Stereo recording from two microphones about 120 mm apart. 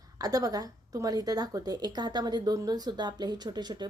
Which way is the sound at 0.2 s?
30° right (ahead or behind).